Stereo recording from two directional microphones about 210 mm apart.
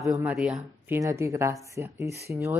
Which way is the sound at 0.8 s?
15° right (ahead or behind).